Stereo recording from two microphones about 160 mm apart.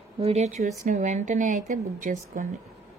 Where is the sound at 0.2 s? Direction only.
45° right (ahead or behind).